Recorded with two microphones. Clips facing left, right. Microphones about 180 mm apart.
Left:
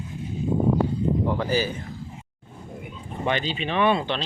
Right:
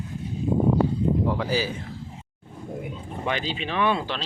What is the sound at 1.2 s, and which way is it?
Speech, centre (ahead or behind).